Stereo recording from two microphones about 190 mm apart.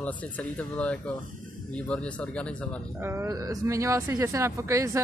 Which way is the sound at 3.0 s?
15° right (ahead or behind).